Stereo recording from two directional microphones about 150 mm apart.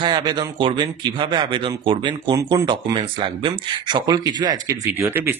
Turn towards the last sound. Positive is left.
turn(degrees=-15)  # may be behind; listen again after turning